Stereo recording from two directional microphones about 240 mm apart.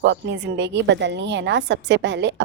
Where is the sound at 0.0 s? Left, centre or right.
Right.